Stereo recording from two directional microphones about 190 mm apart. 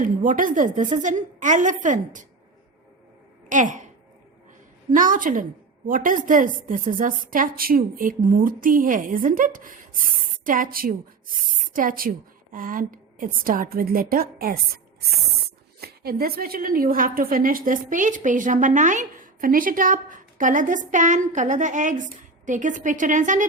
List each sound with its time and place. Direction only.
0.0 s a woman's voice: 45° right (ahead or behind)
3.5 s a woman's voice: 40° right (ahead or behind)
4.9 s a woman's voice: 45° right (ahead or behind)
15.8 s a woman's voice: 55° right (ahead or behind)